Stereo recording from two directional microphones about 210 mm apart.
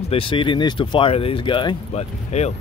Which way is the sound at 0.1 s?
25° left (ahead or behind).